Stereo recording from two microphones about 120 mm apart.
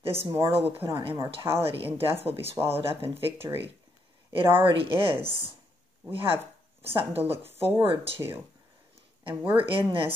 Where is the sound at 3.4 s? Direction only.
20° right (ahead or behind).